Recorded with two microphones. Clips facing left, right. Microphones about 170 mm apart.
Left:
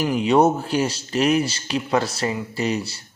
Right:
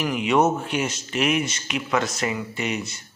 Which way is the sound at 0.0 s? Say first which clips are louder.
Left 3 dB; 35° left (ahead or behind).